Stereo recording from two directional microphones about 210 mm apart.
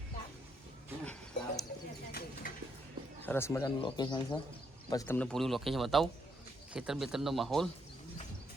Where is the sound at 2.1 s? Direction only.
45° left (ahead or behind).